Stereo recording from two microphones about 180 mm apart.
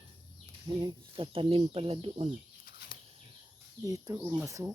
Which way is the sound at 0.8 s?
30° right (ahead or behind).